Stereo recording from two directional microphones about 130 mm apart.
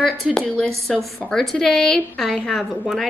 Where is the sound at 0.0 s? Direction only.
5° left (ahead or behind).